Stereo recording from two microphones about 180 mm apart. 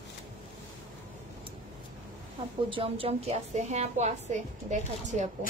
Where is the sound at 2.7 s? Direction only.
30° right (ahead or behind).